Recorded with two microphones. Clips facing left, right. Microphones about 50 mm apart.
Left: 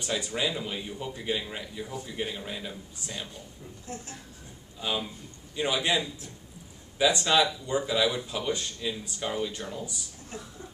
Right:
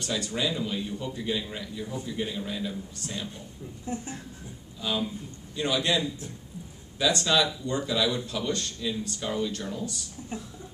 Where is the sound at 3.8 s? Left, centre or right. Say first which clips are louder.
Right 6 dB; right.